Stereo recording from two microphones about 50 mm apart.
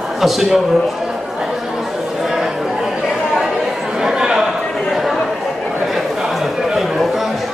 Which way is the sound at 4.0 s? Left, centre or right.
Centre.